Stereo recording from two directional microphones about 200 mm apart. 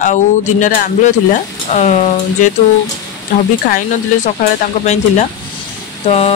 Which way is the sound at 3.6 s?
45° left (ahead or behind).